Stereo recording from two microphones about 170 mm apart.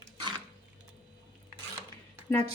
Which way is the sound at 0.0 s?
25° right (ahead or behind).